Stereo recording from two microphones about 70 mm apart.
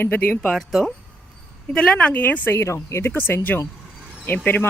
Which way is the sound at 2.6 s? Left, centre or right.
Left.